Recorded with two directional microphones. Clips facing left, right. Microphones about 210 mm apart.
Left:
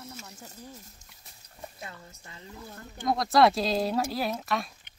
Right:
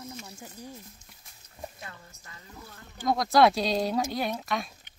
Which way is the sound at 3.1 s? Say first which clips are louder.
Right 1 dB; centre (ahead or behind).